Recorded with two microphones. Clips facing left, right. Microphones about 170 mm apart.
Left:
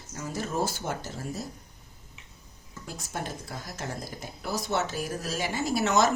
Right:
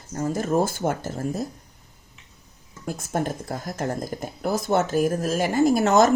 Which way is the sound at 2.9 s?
50° right (ahead or behind).